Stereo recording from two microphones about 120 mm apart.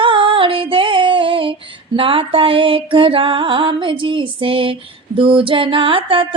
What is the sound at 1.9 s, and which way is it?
Music, 50° right (ahead or behind).